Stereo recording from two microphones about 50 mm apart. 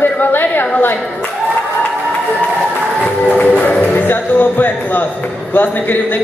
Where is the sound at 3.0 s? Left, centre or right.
Left.